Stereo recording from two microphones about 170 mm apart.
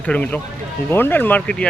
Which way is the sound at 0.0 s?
10° left (ahead or behind).